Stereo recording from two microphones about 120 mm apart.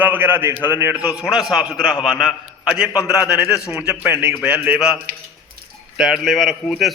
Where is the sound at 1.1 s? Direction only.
5° right (ahead or behind).